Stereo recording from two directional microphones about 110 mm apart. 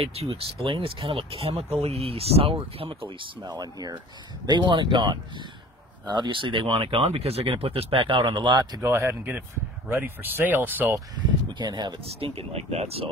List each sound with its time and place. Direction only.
0.0 s speech: 60° right (ahead or behind)
3.4 s speech: 35° right (ahead or behind); by 7.1 s 55° right (ahead or behind)
7.1 s speech: 65° right (ahead or behind); by 8.8 s 40° right (ahead or behind)
8.8 s speech: 25° right (ahead or behind)
11.5 s speech: 40° right (ahead or behind)
12.2 s speech: 65° right (ahead or behind)